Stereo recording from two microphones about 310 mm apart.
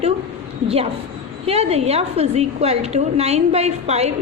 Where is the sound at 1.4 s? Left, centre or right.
Centre.